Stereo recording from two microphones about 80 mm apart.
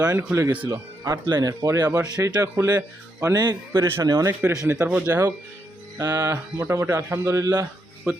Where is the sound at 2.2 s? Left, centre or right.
Right.